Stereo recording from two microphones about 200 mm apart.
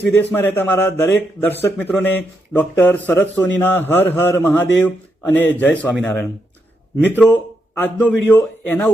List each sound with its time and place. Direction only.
0.2 s a man's voice: 10° left (ahead or behind)